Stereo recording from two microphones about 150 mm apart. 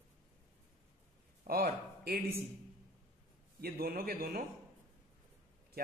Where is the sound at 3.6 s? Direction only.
90° right.